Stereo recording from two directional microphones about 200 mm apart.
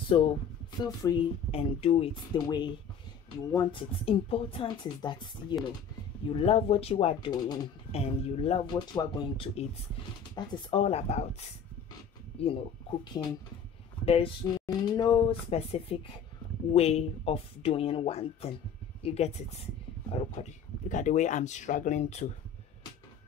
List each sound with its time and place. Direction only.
0.1 s speech: 25° left (ahead or behind)
1.5 s speech: 30° left (ahead or behind)
14.0 s speech: 30° left (ahead or behind)